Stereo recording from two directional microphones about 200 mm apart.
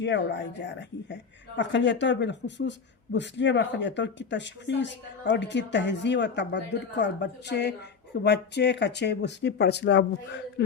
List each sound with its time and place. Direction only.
0.0 s a woman's voice: 60° left (ahead or behind)